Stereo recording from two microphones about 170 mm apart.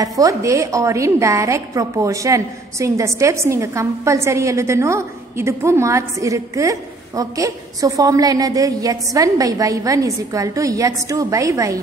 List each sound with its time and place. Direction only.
0.0 s a woman's voice: 20° right (ahead or behind)